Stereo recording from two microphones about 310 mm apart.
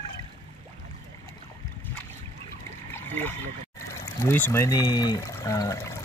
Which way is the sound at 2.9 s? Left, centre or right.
Centre.